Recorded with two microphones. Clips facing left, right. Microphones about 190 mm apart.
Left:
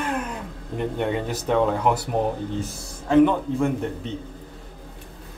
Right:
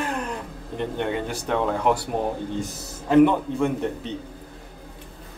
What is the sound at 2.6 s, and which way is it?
A man's voice, 5° right (ahead or behind).